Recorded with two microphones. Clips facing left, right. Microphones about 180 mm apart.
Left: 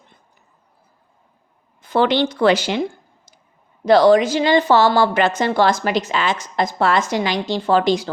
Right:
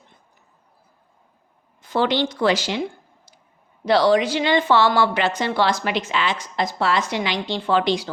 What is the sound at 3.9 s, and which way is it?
A woman's voice, 50° left (ahead or behind).